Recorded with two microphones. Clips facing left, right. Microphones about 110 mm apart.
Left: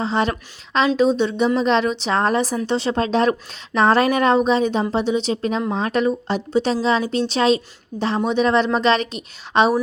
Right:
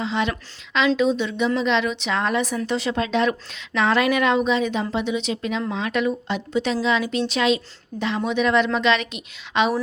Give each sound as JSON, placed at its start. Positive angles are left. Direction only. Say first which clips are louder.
{"t": 0.0, "sound": "a woman's voice", "louder": "left 3 dB", "side_deg": 40}